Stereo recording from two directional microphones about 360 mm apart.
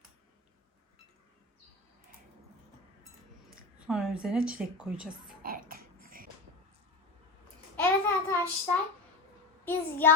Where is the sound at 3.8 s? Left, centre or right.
Centre.